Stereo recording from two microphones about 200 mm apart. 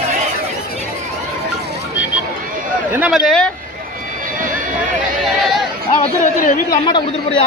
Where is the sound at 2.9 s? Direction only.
5° right (ahead or behind).